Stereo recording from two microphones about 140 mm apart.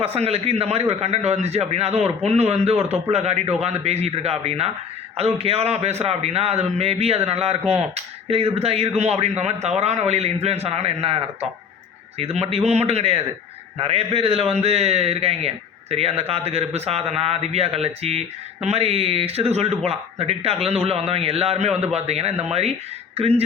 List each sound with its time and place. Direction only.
0.0 s a man's voice: 45° right (ahead or behind)